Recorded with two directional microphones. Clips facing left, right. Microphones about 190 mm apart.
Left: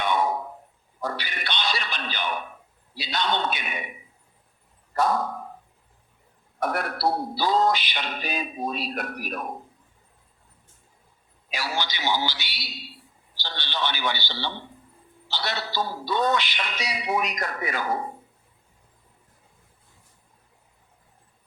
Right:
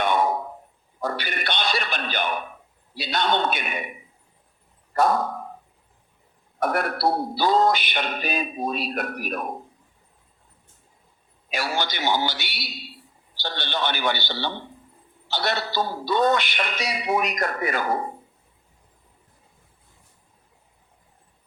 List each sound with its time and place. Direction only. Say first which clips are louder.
0.0 s a sound: right 2 dB; 50° right (ahead or behind)
1.0 s speech: right 4 dB; 50° right (ahead or behind)
4.9 s speech: right 3 dB; 50° right (ahead or behind)
6.6 s speech: right 3 dB; 50° right (ahead or behind)
11.5 s speech: right 3 dB; 50° right (ahead or behind)